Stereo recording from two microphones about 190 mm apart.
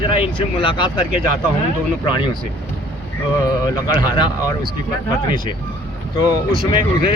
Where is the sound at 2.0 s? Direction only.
25° left (ahead or behind).